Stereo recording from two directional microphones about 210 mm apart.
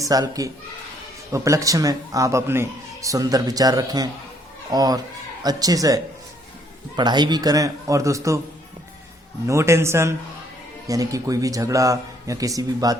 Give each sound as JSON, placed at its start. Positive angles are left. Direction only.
{"t": 0.0, "sound": "speech", "side_deg": -15}
{"t": 9.5, "sound": "speech", "side_deg": -15}